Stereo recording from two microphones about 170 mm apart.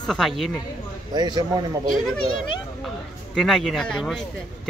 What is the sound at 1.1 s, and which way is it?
Speech, 25° right (ahead or behind).